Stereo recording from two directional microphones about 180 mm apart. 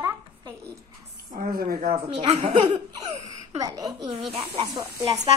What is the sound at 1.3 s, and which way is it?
Speech, 55° right (ahead or behind).